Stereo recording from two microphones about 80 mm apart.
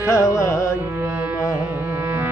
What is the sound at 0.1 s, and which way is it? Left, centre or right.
Music, left.